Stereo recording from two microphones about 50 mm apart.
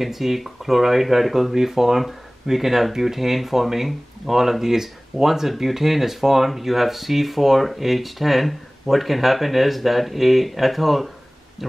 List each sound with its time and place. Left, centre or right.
0.0 s speech: centre